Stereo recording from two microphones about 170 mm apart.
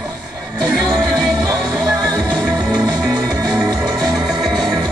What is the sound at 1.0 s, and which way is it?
Music, centre (ahead or behind).